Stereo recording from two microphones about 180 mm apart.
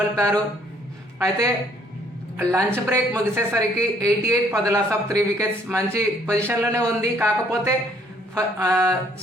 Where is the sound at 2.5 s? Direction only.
15° right (ahead or behind).